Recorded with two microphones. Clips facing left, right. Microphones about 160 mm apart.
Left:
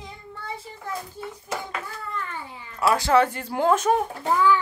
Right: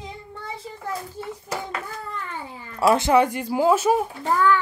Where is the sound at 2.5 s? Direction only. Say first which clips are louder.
Right 3 dB; 40° right (ahead or behind).